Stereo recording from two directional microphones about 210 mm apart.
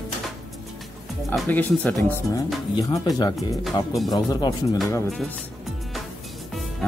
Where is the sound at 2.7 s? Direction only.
20° left (ahead or behind).